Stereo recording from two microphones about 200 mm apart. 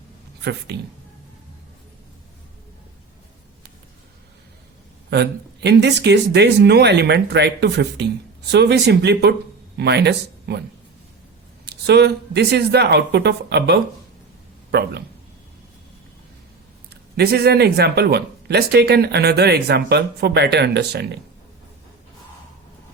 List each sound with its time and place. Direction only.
0.7 s speech: 55° right (ahead or behind)
5.1 s speech: 55° right (ahead or behind)
11.6 s speech: 55° right (ahead or behind)
17.2 s speech: 55° right (ahead or behind)